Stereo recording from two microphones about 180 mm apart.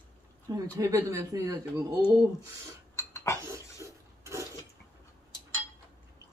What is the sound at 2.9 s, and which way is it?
Cutlery, 15° left (ahead or behind).